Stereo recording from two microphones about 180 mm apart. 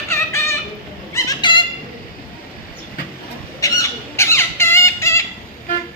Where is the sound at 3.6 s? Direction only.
20° left (ahead or behind).